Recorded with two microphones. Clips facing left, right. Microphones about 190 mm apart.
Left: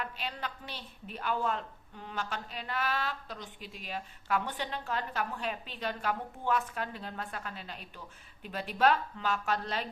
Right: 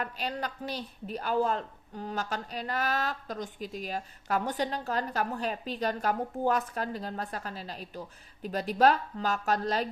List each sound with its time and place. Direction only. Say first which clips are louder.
0.0 s a woman's voice: right 5 dB; 40° right (ahead or behind)